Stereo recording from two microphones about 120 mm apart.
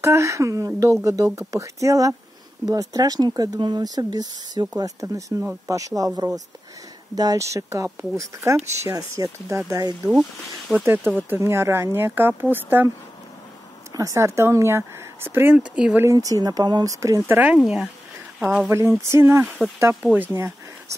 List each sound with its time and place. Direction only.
0.0 s speech: 25° right (ahead or behind)
10.8 s speech: 15° right (ahead or behind)
13.9 s speech: 25° right (ahead or behind); by 16.1 s 10° right (ahead or behind)
16.1 s speech: 30° right (ahead or behind)
17.6 s speech: centre (ahead or behind)
18.7 s speech: 25° right (ahead or behind)